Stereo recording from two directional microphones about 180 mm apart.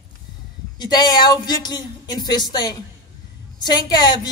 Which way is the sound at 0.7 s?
25° left (ahead or behind).